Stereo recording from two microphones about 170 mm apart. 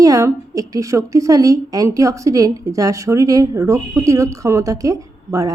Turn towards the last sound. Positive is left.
turn(degrees=-20)  # may be behind; listen again after turning